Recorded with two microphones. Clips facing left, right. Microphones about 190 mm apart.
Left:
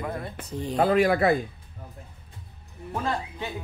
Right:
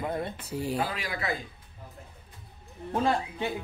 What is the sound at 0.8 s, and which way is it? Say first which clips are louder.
Speech: left 12 dB; 55° left (ahead or behind).